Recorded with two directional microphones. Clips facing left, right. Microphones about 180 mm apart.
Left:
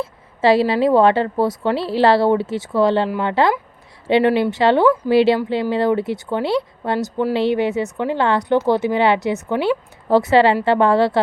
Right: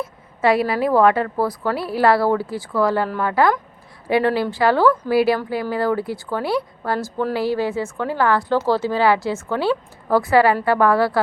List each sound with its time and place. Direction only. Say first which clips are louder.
0.0 s a woman's voice: left 2 dB; 30° left (ahead or behind)